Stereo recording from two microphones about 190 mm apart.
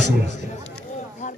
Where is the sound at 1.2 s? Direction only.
40° left (ahead or behind).